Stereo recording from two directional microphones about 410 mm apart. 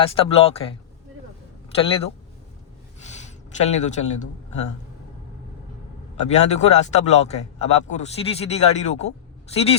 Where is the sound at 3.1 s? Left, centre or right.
Centre.